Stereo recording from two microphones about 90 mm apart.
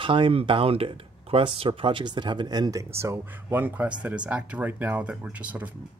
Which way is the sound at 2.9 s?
30° right (ahead or behind).